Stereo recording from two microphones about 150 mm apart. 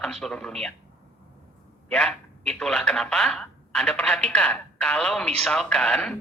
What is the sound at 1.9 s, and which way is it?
Speech, 5° left (ahead or behind).